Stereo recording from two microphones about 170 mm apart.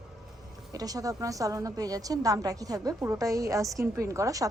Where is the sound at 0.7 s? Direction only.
20° right (ahead or behind).